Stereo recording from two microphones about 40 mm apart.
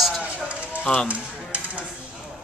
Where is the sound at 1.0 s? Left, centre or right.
Right.